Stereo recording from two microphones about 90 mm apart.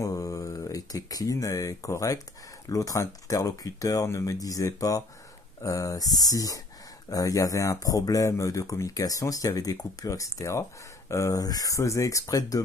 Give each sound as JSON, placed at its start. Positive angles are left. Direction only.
{"t": 0.0, "sound": "speech", "side_deg": 40}